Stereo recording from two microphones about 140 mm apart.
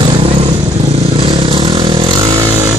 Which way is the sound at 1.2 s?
40° right (ahead or behind).